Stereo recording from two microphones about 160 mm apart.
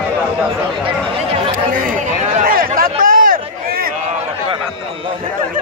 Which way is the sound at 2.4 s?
65° right (ahead or behind).